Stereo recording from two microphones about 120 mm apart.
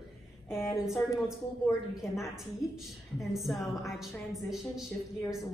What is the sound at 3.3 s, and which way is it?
A woman's voice, centre (ahead or behind).